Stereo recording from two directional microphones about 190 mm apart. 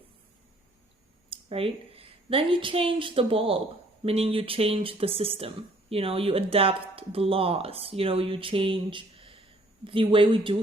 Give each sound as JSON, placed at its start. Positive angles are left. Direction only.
{"t": 1.3, "sound": "a woman's voice", "side_deg": -30}